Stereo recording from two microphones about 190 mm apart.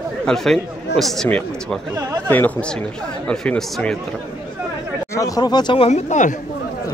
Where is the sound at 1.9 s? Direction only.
15° right (ahead or behind).